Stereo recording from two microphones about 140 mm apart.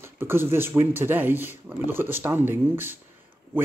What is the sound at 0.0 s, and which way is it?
Speech, 15° right (ahead or behind).